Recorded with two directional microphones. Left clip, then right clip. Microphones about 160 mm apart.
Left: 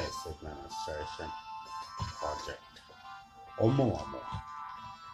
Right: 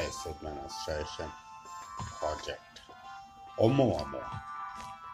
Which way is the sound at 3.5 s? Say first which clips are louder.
Right 3 dB; 20° right (ahead or behind).